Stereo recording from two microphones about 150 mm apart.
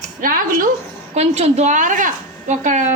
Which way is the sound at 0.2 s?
65° right (ahead or behind).